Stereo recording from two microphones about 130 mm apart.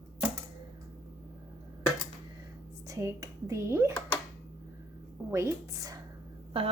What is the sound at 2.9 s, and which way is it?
Speech, 25° right (ahead or behind).